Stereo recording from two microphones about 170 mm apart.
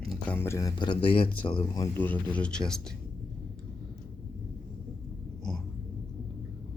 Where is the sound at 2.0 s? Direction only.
10° left (ahead or behind).